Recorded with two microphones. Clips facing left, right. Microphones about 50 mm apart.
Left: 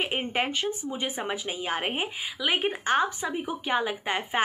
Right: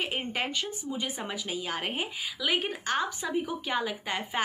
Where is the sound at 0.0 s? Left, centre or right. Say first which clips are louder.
Left 4 dB; left.